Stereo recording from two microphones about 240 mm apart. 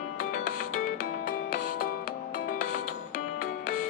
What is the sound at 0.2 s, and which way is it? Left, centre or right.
Music, left.